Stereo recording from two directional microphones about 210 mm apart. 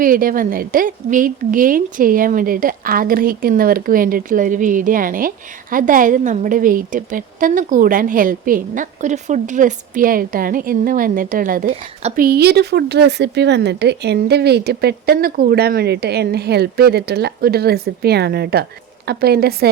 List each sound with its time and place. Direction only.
0.0 s a woman's voice: 40° right (ahead or behind)